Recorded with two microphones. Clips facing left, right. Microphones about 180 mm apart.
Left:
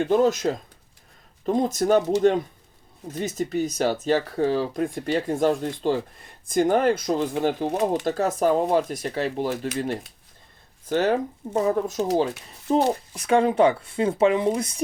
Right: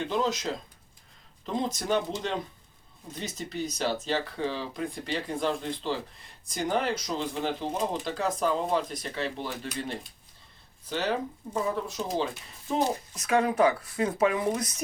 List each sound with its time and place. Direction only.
0.0 s speech: 50° left (ahead or behind)
3.2 s speech: 45° left (ahead or behind)
7.7 s speech: 70° left (ahead or behind)
8.0 s speech: 45° left (ahead or behind); by 14.8 s 25° left (ahead or behind)